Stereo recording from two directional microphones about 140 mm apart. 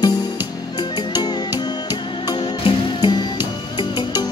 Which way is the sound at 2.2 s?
30° left (ahead or behind).